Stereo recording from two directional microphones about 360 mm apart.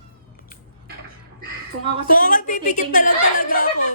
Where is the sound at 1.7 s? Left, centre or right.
Right.